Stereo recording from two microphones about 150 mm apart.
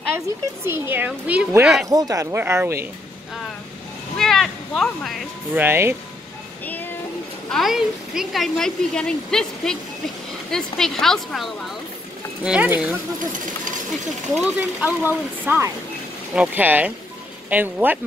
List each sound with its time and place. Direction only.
0.7 s speech: 15° right (ahead or behind)
1.9 s speech: 25° right (ahead or behind)
4.2 s speech: centre (ahead or behind)
5.5 s speech: 15° right (ahead or behind)
6.6 s child singing: 10° left (ahead or behind)
7.4 s speech: centre (ahead or behind)
14.3 s speech: 10° right (ahead or behind)